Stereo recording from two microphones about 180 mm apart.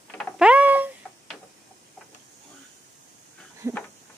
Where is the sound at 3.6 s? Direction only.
20° right (ahead or behind).